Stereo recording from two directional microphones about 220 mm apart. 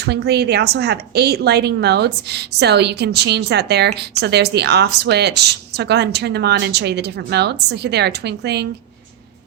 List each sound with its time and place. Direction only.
0.0 s a woman's voice: 50° right (ahead or behind)